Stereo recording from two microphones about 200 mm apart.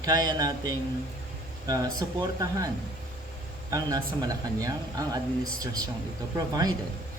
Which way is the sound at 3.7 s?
20° right (ahead or behind).